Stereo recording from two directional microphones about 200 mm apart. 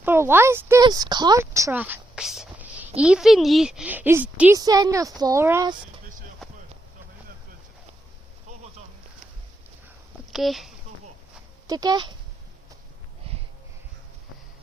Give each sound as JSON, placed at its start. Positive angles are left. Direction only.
{"t": 0.0, "sound": "speech", "side_deg": -10}
{"t": 6.4, "sound": "a sound", "side_deg": 0}
{"t": 10.3, "sound": "speech", "side_deg": 0}
{"t": 11.7, "sound": "speech", "side_deg": -20}